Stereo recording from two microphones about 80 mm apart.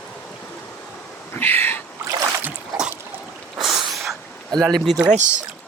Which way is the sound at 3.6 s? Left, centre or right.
Centre.